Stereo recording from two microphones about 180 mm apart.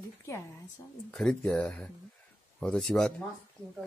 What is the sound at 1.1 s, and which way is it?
Speech, 5° left (ahead or behind).